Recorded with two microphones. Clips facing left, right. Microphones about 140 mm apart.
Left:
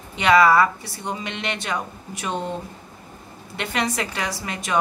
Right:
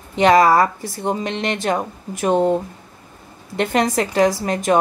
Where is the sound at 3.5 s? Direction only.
40° right (ahead or behind).